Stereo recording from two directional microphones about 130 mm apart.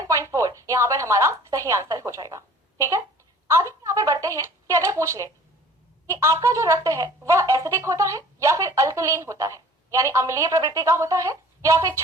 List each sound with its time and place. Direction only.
0.1 s speech: 25° right (ahead or behind)
3.5 s speech: 25° right (ahead or behind)